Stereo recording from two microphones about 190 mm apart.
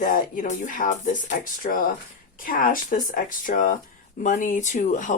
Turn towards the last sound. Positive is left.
turn(degrees=40)  # may be behind; listen again after turning